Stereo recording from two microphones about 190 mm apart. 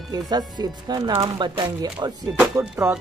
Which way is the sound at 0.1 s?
20° right (ahead or behind).